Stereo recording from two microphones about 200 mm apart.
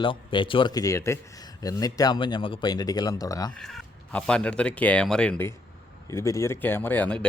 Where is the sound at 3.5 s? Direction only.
5° left (ahead or behind).